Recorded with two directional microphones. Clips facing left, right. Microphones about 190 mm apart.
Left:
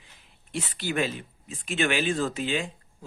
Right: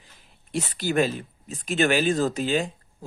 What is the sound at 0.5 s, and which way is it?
Speech, 40° right (ahead or behind).